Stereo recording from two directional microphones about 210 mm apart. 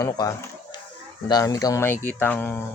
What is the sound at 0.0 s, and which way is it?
Speech, 15° left (ahead or behind).